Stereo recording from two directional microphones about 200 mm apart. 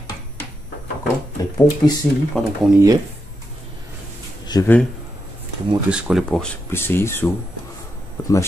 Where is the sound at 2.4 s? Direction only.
5° left (ahead or behind).